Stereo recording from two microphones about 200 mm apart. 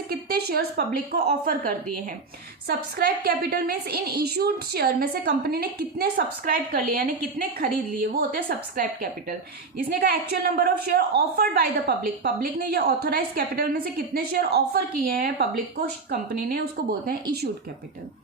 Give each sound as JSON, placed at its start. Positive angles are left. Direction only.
{"t": 0.1, "sound": "a woman's voice", "side_deg": -50}